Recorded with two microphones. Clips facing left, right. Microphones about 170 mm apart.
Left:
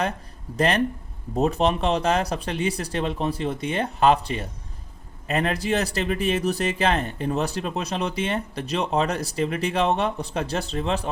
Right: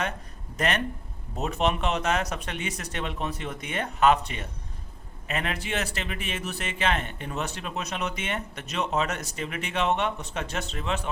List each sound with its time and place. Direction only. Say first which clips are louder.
0.5 s speech: left 6 dB; 35° left (ahead or behind)